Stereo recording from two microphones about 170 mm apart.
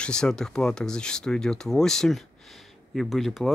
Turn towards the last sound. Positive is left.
turn(degrees=0)  # may be behind; listen again after turning